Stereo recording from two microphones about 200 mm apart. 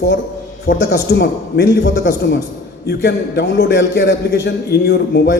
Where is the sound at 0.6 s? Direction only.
55° left (ahead or behind).